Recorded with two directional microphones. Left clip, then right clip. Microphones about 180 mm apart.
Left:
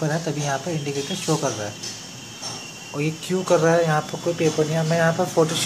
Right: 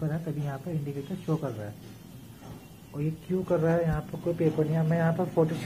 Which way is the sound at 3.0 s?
20° left (ahead or behind).